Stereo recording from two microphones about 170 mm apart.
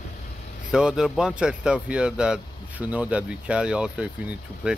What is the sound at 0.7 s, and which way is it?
Speech, 5° right (ahead or behind).